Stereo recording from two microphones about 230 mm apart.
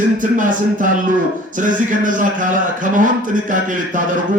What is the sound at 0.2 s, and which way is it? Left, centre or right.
A man's voice, right.